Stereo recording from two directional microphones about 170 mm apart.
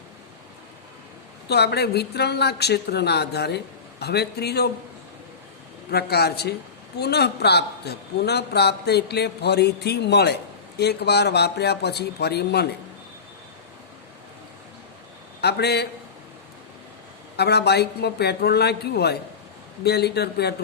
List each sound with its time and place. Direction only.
1.5 s a man's voice: 75° left (ahead or behind)
5.9 s a man's voice: 70° left (ahead or behind)
15.4 s a man's voice: 75° left (ahead or behind)
17.3 s a man's voice: 75° left (ahead or behind)